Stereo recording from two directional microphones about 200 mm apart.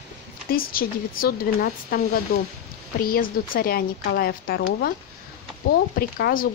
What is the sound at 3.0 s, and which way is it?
A woman's voice, 45° left (ahead or behind).